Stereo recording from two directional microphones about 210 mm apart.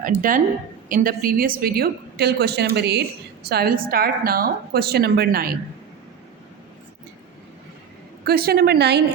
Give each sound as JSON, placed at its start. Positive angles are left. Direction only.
{"t": 0.0, "sound": "a woman's voice", "side_deg": -40}
{"t": 8.2, "sound": "a woman's voice", "side_deg": -45}